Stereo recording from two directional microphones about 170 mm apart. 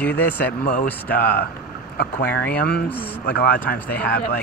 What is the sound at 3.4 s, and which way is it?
Speech, 10° left (ahead or behind).